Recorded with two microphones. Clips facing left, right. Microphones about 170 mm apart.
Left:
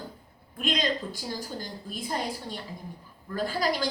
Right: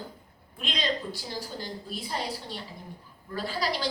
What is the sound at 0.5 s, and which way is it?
A woman's voice, 45° left (ahead or behind).